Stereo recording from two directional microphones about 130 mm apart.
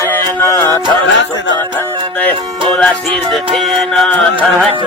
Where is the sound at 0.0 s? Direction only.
20° left (ahead or behind).